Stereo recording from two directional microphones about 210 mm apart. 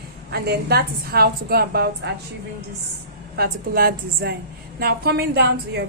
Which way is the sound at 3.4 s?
45° right (ahead or behind).